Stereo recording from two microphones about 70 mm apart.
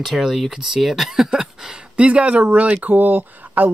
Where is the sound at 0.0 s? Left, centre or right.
Centre.